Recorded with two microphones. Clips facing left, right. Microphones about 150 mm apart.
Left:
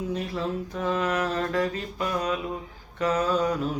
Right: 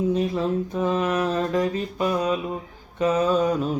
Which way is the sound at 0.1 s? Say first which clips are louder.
Right 6 dB; 20° right (ahead or behind).